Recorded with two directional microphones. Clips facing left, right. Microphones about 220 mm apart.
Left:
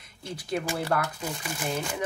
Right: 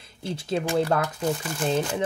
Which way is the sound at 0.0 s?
30° right (ahead or behind).